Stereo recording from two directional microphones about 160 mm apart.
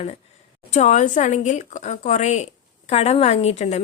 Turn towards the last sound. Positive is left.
turn(degrees=45)  # may be behind; listen again after turning